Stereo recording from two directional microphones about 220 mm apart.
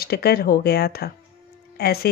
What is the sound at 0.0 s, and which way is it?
A woman's voice, 45° left (ahead or behind).